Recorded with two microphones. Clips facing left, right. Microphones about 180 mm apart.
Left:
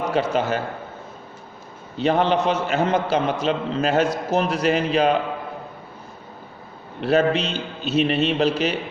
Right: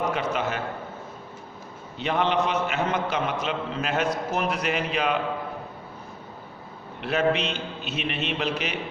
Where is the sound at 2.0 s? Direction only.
35° left (ahead or behind).